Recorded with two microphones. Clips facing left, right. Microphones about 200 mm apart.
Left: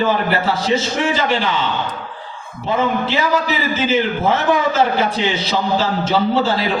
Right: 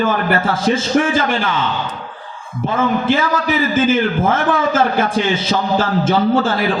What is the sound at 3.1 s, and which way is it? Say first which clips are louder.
A man's voice: right 2 dB; 50° right (ahead or behind).